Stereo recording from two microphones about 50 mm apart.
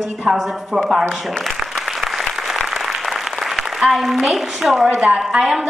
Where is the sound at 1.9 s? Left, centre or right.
Centre.